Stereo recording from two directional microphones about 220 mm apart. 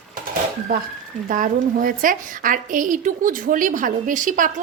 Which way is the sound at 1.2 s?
35° right (ahead or behind).